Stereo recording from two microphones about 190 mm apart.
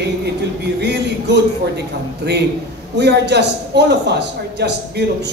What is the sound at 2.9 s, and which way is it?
A man's voice, 60° right (ahead or behind).